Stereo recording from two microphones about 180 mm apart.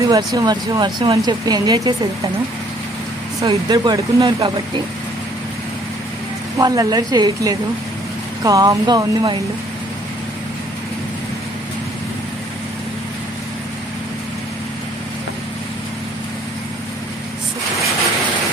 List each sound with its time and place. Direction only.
0.1 s speech: 20° right (ahead or behind)
3.4 s speech: 20° right (ahead or behind)
6.6 s speech: 20° right (ahead or behind)